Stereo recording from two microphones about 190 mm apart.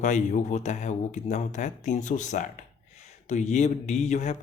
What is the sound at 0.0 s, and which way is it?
Speech, 40° left (ahead or behind).